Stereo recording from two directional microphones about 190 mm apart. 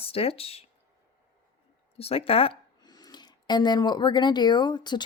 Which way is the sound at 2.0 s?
30° left (ahead or behind).